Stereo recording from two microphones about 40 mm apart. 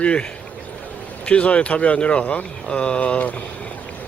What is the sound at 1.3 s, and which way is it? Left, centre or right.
Speech, left.